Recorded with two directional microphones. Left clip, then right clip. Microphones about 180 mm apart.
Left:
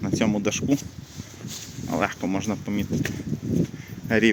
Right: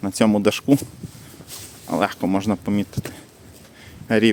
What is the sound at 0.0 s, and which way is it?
Speech, 40° right (ahead or behind).